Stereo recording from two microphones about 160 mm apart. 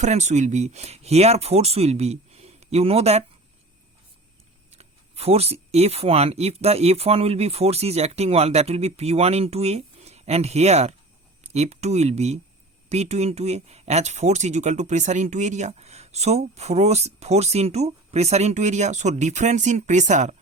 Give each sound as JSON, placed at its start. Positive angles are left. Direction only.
{"t": 0.0, "sound": "speech", "side_deg": -45}
{"t": 4.7, "sound": "speech", "side_deg": -40}